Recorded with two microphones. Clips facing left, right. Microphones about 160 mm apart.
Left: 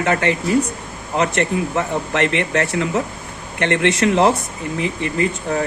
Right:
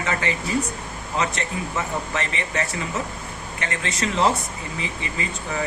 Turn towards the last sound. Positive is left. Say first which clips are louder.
# left 9 dB
turn(degrees=60)  # may be behind; listen again after turning